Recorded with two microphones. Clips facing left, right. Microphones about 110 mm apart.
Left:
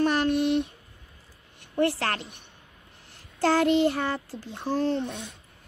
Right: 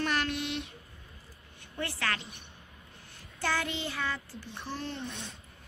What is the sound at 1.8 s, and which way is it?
Speech, 65° left (ahead or behind).